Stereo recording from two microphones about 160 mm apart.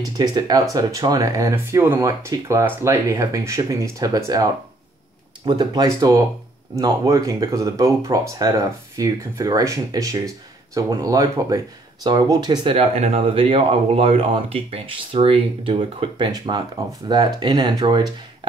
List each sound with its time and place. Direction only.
0.0 s speech: 25° right (ahead or behind)
5.4 s speech: 25° right (ahead or behind)